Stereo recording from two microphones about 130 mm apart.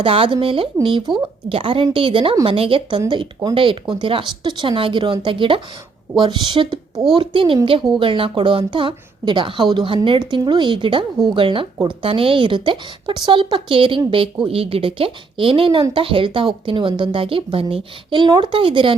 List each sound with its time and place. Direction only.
0.0 s speech: 45° right (ahead or behind)